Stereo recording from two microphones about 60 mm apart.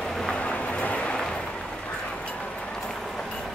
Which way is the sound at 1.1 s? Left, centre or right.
Centre.